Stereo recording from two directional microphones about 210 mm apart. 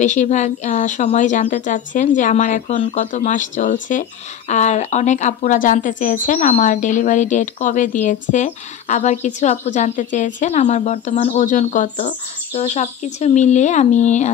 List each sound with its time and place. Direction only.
0.0 s speech: 35° left (ahead or behind)